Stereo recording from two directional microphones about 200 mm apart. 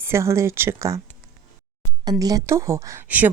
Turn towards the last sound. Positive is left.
turn(degrees=-10)  # may be behind; listen again after turning